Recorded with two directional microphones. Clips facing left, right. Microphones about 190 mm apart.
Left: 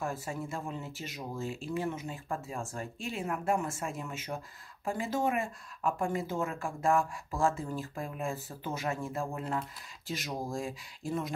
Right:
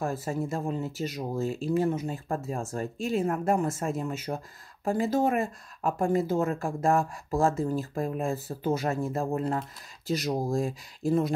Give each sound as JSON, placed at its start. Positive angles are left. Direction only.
{"t": 0.0, "sound": "speech", "side_deg": -40}